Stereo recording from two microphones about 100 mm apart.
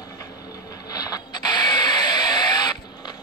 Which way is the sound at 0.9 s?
35° left (ahead or behind).